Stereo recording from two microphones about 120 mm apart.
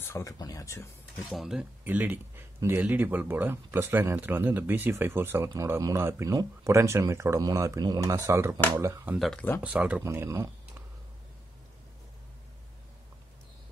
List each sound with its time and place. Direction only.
0.0 s speech: 25° left (ahead or behind)
1.3 s speech: 5° right (ahead or behind); by 9.1 s 25° right (ahead or behind)
9.6 s speech: 10° right (ahead or behind)
10.0 s speech: 20° right (ahead or behind)